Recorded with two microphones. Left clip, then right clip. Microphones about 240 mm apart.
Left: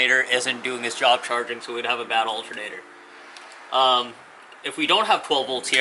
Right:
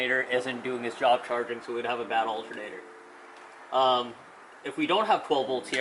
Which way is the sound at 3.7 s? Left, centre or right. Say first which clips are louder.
Left 5 dB; centre.